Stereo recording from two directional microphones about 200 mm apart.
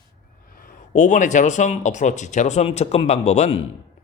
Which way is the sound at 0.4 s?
45° left (ahead or behind).